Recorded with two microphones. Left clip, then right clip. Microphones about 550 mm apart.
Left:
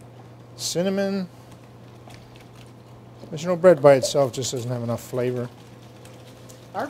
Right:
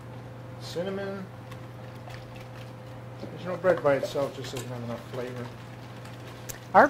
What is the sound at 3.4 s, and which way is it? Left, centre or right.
Speech, left.